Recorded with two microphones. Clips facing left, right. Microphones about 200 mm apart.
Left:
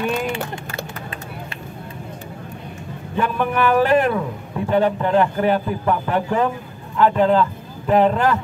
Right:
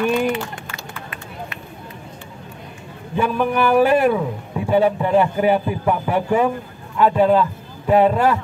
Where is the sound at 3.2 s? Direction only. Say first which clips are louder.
Right 1 dB; 10° right (ahead or behind).